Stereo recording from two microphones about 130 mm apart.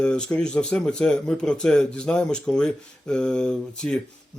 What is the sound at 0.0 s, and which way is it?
A man's voice, 5° left (ahead or behind).